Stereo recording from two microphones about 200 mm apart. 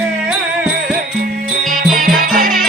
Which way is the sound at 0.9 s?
45° right (ahead or behind).